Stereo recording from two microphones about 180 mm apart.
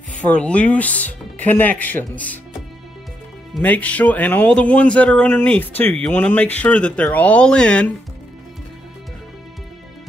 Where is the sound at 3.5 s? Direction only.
10° left (ahead or behind).